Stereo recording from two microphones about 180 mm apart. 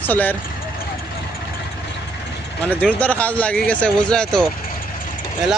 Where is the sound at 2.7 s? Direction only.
5° left (ahead or behind).